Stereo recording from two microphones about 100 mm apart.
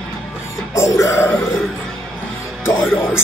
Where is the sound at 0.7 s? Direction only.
30° left (ahead or behind).